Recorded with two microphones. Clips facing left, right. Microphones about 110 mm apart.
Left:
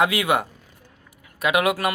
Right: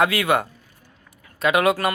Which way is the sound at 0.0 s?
15° left (ahead or behind).